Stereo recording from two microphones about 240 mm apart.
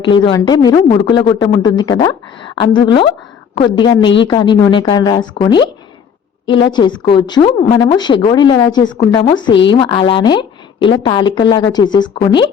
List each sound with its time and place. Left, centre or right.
0.0 s a woman's voice: centre